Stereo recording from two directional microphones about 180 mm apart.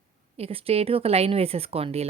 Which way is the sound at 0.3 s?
35° right (ahead or behind).